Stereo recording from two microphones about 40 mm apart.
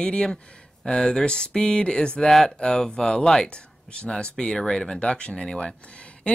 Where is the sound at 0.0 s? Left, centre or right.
Left.